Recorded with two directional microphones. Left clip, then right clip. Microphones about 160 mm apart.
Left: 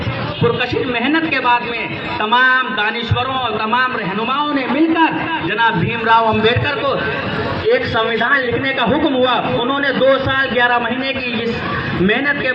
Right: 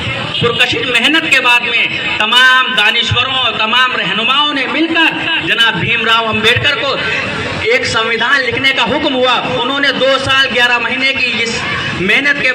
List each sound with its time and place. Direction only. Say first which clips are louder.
0.4 s a man's voice: right 4 dB; 40° left (ahead or behind)
4.9 s a man's voice: right 4 dB; 40° left (ahead or behind)